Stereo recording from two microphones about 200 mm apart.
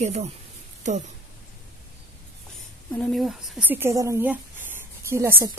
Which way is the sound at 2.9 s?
Centre (ahead or behind).